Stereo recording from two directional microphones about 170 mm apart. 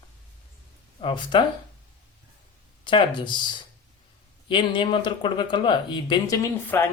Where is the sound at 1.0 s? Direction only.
30° left (ahead or behind).